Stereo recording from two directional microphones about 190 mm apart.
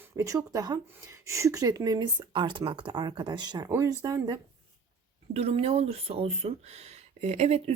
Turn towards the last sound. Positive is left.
turn(degrees=-35)  # may be behind; listen again after turning